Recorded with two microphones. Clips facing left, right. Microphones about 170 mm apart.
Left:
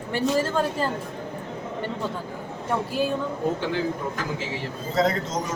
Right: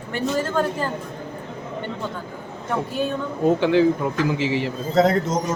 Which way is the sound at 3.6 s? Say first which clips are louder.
Right 9 dB; 80° right.